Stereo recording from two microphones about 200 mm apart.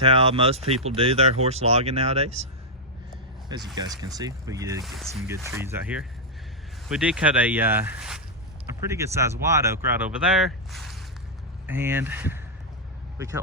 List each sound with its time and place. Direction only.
0.0 s speech: 25° right (ahead or behind)
3.8 s speech: 20° right (ahead or behind)
4.8 s speech: centre (ahead or behind)
5.5 s speech: 10° right (ahead or behind)
11.6 s speech: 10° right (ahead or behind)